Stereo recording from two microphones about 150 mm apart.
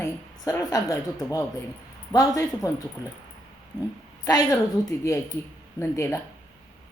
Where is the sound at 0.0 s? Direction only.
20° left (ahead or behind).